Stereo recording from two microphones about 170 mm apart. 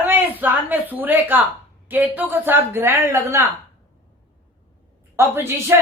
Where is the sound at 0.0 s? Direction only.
10° right (ahead or behind).